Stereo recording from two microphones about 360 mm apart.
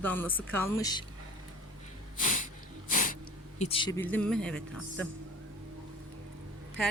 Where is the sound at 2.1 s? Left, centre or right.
Left.